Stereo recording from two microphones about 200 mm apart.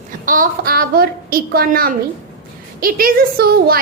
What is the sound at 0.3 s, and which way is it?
A woman's voice, 45° right (ahead or behind).